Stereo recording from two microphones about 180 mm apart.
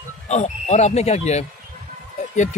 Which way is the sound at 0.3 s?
40° left (ahead or behind).